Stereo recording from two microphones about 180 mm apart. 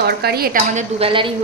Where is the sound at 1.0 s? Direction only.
30° right (ahead or behind).